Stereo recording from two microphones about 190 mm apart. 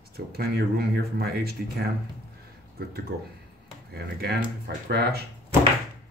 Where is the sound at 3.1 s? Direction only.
55° right (ahead or behind).